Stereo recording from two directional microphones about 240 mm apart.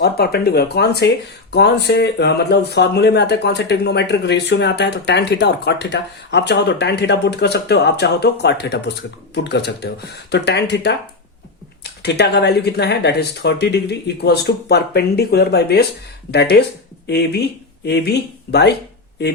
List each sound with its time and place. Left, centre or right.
0.0 s speech: left